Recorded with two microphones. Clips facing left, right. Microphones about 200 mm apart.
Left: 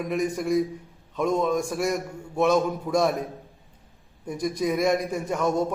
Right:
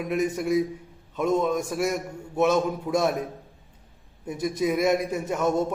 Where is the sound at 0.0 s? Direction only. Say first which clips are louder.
Even; 5° right (ahead or behind).